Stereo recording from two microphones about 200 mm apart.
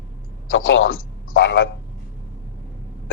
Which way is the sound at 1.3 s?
65° left (ahead or behind).